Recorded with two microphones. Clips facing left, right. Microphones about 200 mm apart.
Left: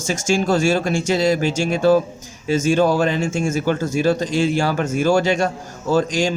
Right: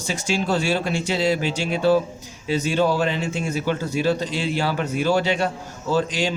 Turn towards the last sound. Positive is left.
turn(degrees=45)  # may be behind; listen again after turning